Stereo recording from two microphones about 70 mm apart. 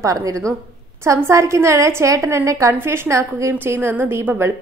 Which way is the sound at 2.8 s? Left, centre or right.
Right.